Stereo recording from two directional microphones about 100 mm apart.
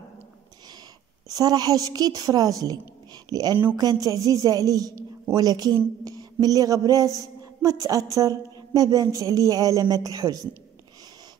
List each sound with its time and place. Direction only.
1.3 s a woman's voice: 40° right (ahead or behind)
6.0 s a sound: 40° right (ahead or behind)
7.2 s a woman's voice: 35° right (ahead or behind)